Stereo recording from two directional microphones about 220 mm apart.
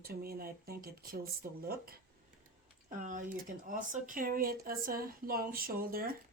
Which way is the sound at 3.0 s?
35° right (ahead or behind).